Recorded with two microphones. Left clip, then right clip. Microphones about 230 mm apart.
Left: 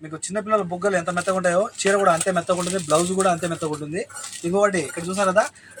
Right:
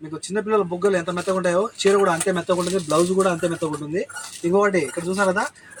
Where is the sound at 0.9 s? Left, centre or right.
Centre.